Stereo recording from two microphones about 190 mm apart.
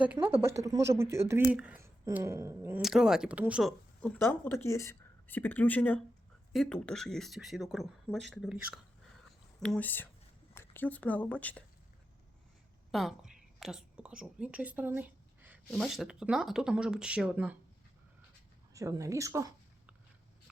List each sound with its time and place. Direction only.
0.0 s speech: 10° right (ahead or behind)
12.9 s a woman's voice: centre (ahead or behind)
18.7 s speech: 15° right (ahead or behind)